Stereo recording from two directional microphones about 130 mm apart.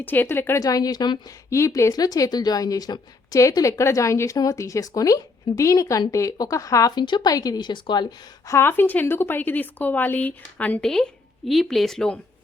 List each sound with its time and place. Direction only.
0.0 s speech: 15° left (ahead or behind)
0.6 s a woman's voice: 30° left (ahead or behind)
8.4 s speech: 20° left (ahead or behind)